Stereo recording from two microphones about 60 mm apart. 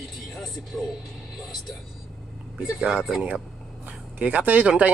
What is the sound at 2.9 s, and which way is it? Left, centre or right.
Speech, centre.